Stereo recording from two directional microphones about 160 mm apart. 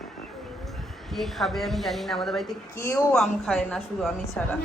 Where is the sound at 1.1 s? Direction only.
Centre (ahead or behind).